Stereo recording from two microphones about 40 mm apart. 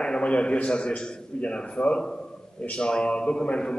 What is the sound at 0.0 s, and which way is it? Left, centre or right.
A man's voice, left.